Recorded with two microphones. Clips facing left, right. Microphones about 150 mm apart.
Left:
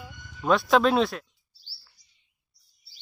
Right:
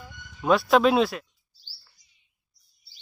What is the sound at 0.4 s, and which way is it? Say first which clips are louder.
Speech: right 2 dB; centre (ahead or behind).